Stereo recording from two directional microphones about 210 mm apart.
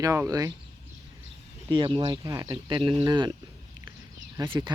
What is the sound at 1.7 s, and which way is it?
Speech, 25° right (ahead or behind).